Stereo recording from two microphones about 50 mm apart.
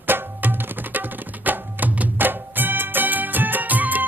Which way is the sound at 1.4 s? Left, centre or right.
Right.